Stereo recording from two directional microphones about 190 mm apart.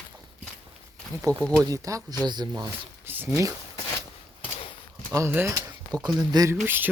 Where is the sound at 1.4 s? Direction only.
5° left (ahead or behind).